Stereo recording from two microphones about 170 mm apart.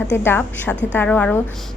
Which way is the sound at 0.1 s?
10° left (ahead or behind).